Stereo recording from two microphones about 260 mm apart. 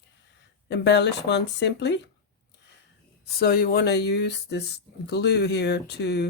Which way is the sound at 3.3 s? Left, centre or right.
Left.